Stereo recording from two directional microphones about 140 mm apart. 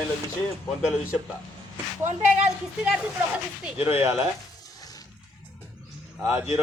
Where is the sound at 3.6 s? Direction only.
15° right (ahead or behind).